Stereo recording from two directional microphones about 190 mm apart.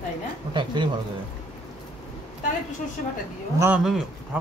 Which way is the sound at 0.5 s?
25° right (ahead or behind).